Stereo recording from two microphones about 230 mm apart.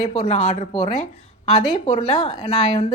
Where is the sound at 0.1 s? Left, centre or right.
Left.